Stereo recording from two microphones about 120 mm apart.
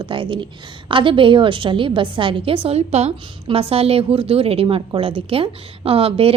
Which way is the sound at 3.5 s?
55° right (ahead or behind).